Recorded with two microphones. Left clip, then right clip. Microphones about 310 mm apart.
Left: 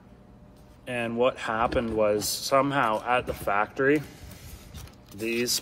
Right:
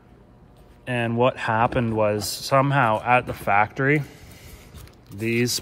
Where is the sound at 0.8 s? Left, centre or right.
Right.